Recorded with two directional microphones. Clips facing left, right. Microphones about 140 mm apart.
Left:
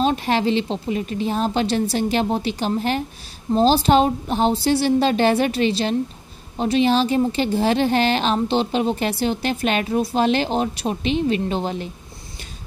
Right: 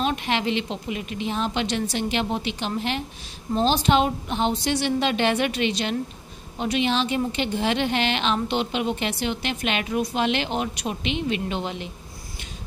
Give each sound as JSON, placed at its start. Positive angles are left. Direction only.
{"t": 0.0, "sound": "a woman's voice", "side_deg": 35}